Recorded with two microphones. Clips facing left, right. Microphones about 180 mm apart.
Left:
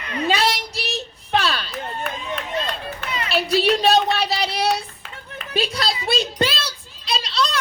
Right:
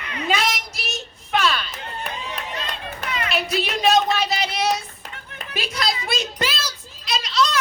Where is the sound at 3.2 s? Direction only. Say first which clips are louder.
Left 4 dB; 30° left (ahead or behind).